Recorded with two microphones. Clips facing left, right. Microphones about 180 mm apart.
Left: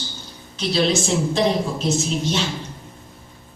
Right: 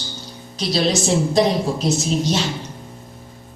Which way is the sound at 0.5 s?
35° right (ahead or behind).